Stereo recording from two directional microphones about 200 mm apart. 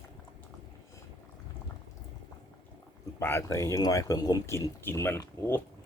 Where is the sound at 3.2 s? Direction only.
10° left (ahead or behind).